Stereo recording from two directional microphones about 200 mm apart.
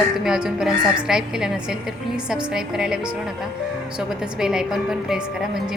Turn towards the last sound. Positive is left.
turn(degrees=0)  # may be behind; listen again after turning